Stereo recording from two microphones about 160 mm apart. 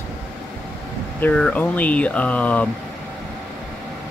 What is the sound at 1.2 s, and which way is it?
Speech, 10° left (ahead or behind).